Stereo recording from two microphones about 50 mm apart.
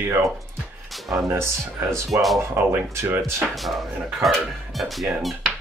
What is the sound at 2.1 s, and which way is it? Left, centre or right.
Speech, right.